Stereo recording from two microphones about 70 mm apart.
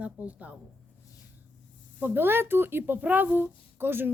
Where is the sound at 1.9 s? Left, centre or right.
Right.